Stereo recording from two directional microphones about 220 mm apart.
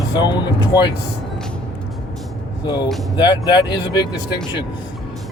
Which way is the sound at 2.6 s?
20° left (ahead or behind).